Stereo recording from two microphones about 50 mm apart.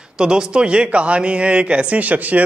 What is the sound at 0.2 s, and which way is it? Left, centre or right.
Speech, centre.